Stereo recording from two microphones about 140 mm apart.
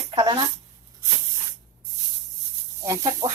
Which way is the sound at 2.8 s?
25° right (ahead or behind).